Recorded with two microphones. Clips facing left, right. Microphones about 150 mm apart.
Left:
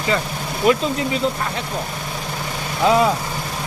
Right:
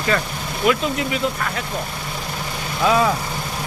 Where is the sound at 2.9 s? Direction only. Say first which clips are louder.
Left 2 dB; 20° left (ahead or behind).